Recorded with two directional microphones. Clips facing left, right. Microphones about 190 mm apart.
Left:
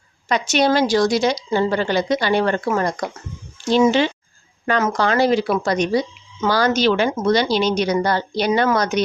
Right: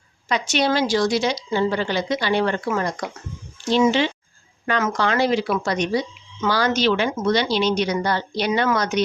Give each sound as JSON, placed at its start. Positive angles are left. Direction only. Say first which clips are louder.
{"t": 0.3, "sound": "a woman's voice", "louder": "left 3 dB", "side_deg": 45}